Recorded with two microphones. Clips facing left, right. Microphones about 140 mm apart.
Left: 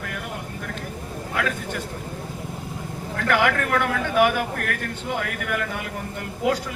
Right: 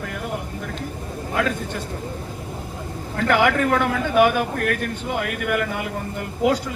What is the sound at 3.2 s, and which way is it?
Speech, 15° right (ahead or behind).